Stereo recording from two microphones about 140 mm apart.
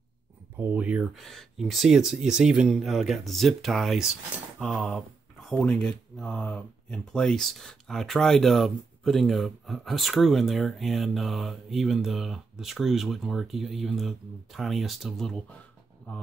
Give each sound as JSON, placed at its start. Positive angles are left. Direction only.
{"t": 0.6, "sound": "speech", "side_deg": -10}